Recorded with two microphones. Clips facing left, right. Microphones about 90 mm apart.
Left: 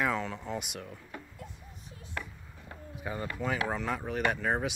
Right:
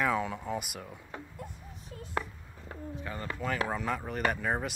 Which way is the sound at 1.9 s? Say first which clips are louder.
Right 6 dB; 40° right (ahead or behind).